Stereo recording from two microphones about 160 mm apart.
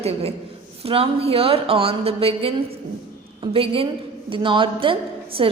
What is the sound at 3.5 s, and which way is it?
Speech, 35° right (ahead or behind).